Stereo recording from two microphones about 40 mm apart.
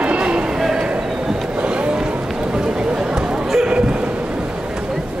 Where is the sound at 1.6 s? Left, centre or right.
Right.